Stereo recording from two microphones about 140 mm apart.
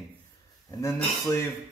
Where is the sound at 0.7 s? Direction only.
20° left (ahead or behind).